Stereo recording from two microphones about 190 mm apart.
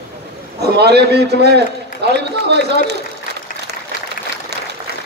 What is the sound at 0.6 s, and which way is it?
A man's voice, 60° right (ahead or behind).